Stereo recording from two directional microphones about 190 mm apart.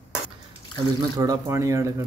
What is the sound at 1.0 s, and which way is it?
Speech, 20° right (ahead or behind).